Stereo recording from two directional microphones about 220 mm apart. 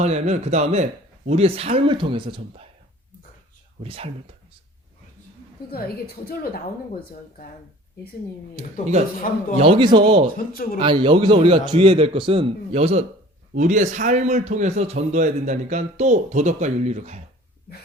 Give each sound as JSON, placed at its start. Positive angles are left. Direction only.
{"t": 0.0, "sound": "a man's voice", "side_deg": -30}
{"t": 3.8, "sound": "a man's voice", "side_deg": -25}
{"t": 5.7, "sound": "a woman's voice", "side_deg": 45}
{"t": 9.6, "sound": "a man's voice", "side_deg": -25}
{"t": 10.3, "sound": "speech", "side_deg": 40}
{"t": 10.8, "sound": "a man's voice", "side_deg": -20}